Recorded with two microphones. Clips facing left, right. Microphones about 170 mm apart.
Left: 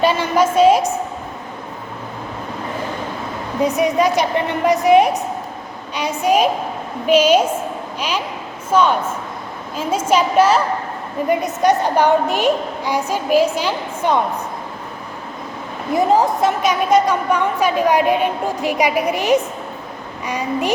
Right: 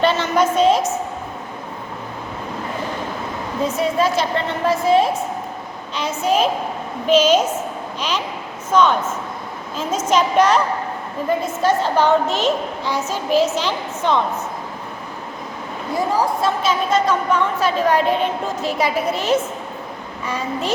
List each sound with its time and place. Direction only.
0.0 s a woman's voice: 10° left (ahead or behind)
3.8 s a woman's voice: 15° left (ahead or behind)
8.7 s a woman's voice: 10° left (ahead or behind)
10.1 s a woman's voice: 10° left (ahead or behind)
11.3 s a woman's voice: 15° left (ahead or behind)
16.0 s a woman's voice: 20° left (ahead or behind)